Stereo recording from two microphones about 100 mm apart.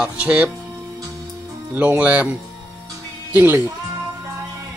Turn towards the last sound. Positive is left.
turn(degrees=-20)  # may be behind; listen again after turning